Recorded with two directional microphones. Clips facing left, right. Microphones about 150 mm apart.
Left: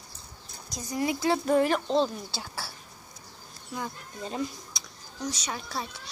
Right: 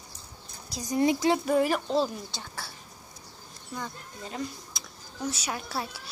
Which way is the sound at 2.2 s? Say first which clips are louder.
Left 2 dB; 5° left (ahead or behind).